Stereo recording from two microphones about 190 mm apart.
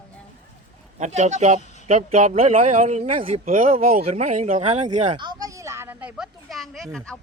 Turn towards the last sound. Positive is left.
turn(degrees=5)  # may be behind; listen again after turning